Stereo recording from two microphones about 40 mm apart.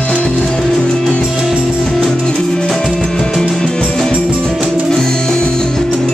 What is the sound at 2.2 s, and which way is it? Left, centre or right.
Music, left.